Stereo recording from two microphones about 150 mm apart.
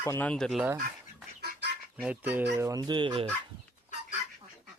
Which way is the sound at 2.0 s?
10° right (ahead or behind).